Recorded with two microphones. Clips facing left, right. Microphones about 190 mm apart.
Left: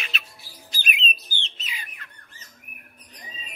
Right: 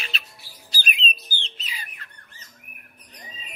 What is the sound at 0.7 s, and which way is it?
Bird, 35° right (ahead or behind).